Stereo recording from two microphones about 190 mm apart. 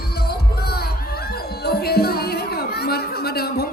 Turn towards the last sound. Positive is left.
turn(degrees=55)  # may be behind; listen again after turning